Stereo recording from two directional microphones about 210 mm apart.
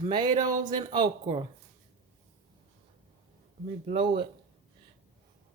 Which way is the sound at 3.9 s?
25° right (ahead or behind).